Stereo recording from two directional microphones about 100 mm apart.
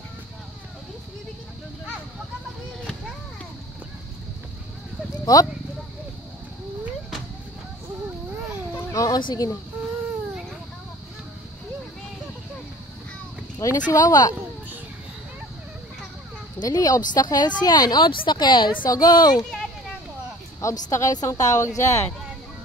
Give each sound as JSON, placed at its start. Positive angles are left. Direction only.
{"t": 5.2, "sound": "speech", "side_deg": 35}
{"t": 8.9, "sound": "speech", "side_deg": 40}
{"t": 13.6, "sound": "speech", "side_deg": 35}
{"t": 16.6, "sound": "speech", "side_deg": 35}
{"t": 18.9, "sound": "speech", "side_deg": 40}
{"t": 19.3, "sound": "speech", "side_deg": 5}
{"t": 20.6, "sound": "speech", "side_deg": 30}